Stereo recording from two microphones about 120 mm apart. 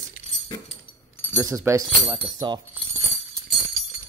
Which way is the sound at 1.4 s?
25° right (ahead or behind).